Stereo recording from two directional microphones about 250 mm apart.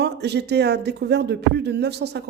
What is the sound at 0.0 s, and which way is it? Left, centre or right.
Speech, right.